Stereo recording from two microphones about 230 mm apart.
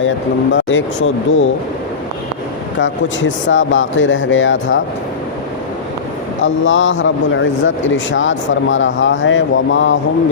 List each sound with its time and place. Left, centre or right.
0.5 s speech: left
2.7 s speech: left
6.4 s speech: left